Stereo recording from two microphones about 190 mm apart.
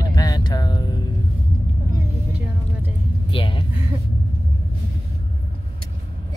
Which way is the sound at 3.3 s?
30° left (ahead or behind).